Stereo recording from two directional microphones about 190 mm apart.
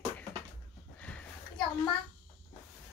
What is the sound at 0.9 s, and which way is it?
Sniff, 5° left (ahead or behind).